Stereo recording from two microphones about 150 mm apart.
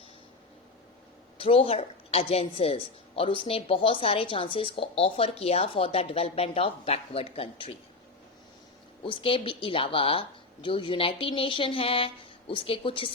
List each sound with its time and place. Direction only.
1.4 s a woman's voice: 40° left (ahead or behind)
9.0 s speech: 35° left (ahead or behind)